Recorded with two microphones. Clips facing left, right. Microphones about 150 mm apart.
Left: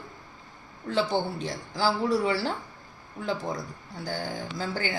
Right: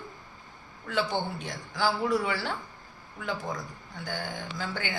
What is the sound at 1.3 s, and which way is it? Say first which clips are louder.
A woman's voice: left 2 dB; 35° left (ahead or behind).